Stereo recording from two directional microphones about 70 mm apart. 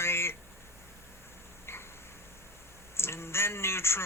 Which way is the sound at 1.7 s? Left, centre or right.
Left.